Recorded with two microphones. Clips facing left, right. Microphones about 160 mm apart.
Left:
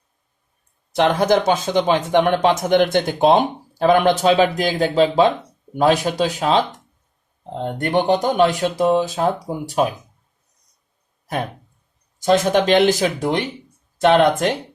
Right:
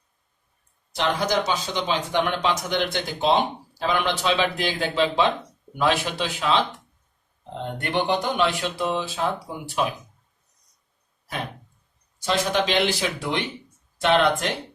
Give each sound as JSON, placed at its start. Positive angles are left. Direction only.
{"t": 0.9, "sound": "speech", "side_deg": 55}
{"t": 12.2, "sound": "speech", "side_deg": 45}